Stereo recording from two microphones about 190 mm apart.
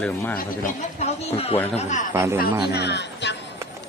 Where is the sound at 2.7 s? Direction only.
60° left (ahead or behind).